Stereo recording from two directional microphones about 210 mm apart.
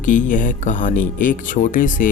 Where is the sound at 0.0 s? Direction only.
35° left (ahead or behind).